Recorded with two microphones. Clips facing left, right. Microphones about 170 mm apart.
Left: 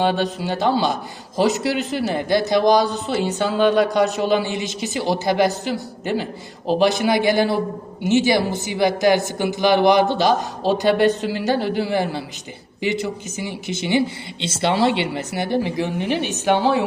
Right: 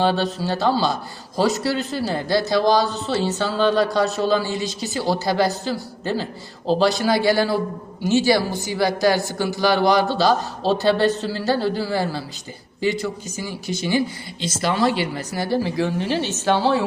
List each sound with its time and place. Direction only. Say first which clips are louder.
0.0 s speech: even; 15° left (ahead or behind)